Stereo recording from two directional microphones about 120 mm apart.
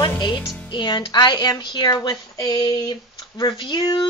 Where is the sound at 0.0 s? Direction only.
40° left (ahead or behind).